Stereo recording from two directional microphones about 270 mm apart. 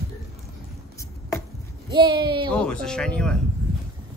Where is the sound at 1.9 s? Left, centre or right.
Centre.